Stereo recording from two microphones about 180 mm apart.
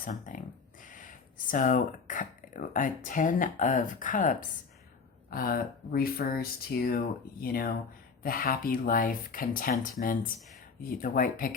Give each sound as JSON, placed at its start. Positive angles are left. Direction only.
{"t": 0.0, "sound": "speech", "side_deg": 45}